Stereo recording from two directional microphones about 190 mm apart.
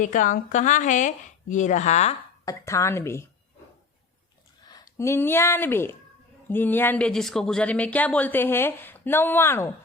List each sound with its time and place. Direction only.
0.0 s speech: 40° left (ahead or behind)
2.4 s speech: 15° left (ahead or behind)
4.7 s speech: 15° left (ahead or behind)